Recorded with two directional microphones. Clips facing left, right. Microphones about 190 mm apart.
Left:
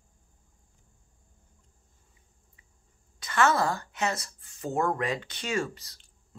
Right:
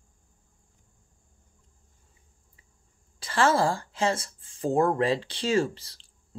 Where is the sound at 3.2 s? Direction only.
30° right (ahead or behind).